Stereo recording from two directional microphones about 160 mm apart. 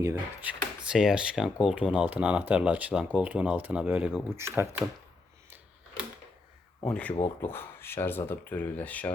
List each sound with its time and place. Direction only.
0.0 s speech: 10° right (ahead or behind)
6.8 s speech: 5° left (ahead or behind)